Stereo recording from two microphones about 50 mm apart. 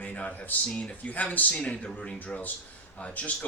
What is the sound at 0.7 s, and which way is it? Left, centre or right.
Speech, centre.